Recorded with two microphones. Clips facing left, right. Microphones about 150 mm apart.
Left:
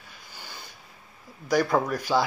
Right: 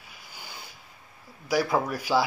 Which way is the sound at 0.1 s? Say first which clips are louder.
Even; 10° right (ahead or behind).